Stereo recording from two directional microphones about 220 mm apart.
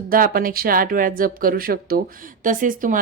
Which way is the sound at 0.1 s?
40° right (ahead or behind).